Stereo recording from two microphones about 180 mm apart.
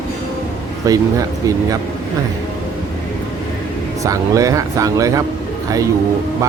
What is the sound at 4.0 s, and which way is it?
Speech, 20° right (ahead or behind).